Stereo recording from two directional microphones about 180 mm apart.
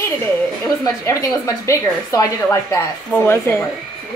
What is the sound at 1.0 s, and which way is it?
A woman's voice, 15° left (ahead or behind).